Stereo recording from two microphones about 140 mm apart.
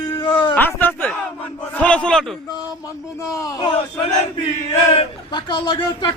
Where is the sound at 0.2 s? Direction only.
35° left (ahead or behind).